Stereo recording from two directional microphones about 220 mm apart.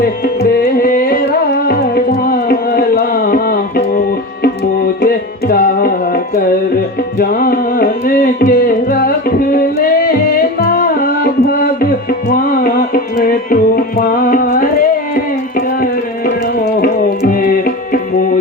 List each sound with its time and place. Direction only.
0.6 s music: 40° left (ahead or behind)
5.0 s music: 40° left (ahead or behind)